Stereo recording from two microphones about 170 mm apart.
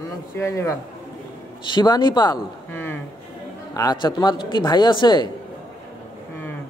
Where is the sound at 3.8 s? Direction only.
25° left (ahead or behind).